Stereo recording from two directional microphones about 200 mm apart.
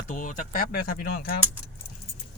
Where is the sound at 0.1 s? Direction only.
40° left (ahead or behind).